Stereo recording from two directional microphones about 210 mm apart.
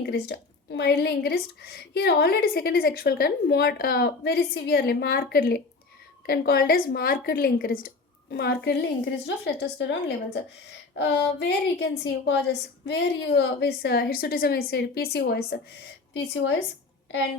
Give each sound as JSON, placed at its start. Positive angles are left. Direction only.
{"t": 0.0, "sound": "a woman's voice", "side_deg": 50}